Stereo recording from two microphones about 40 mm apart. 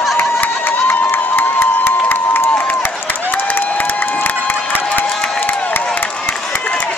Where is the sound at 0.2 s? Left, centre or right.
Left.